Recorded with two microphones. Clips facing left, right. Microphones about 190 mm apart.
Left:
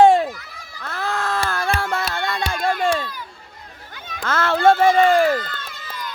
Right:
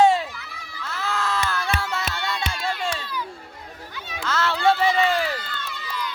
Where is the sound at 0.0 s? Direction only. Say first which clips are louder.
Left 5 dB; 50° left (ahead or behind).